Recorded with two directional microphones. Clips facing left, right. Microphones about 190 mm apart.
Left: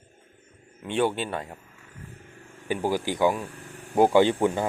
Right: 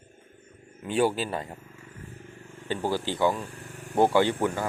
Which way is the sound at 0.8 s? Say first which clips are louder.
Even; 5° right (ahead or behind).